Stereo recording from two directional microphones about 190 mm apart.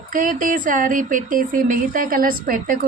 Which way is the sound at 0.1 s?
45° right (ahead or behind).